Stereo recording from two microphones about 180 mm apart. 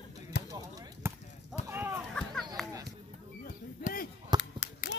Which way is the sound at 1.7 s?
10° right (ahead or behind).